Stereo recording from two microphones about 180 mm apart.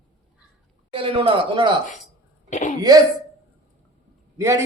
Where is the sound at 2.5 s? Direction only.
40° left (ahead or behind).